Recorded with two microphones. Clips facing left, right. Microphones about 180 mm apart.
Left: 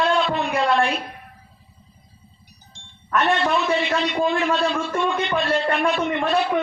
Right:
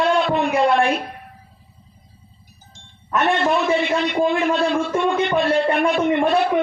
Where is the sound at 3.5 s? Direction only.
55° right (ahead or behind).